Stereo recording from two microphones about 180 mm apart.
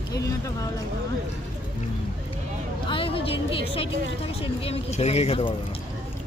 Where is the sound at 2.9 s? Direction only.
30° left (ahead or behind).